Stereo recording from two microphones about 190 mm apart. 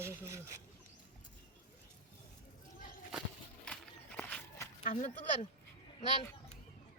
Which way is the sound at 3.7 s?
5° left (ahead or behind).